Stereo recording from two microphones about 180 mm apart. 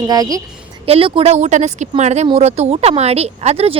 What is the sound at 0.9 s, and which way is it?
Speech, 30° right (ahead or behind).